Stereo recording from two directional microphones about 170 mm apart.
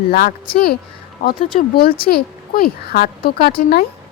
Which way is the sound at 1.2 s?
55° left (ahead or behind).